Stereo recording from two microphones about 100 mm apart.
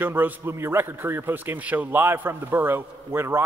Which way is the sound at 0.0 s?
20° right (ahead or behind).